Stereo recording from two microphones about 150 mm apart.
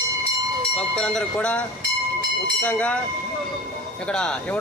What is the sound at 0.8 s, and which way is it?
A man's voice, 5° left (ahead or behind).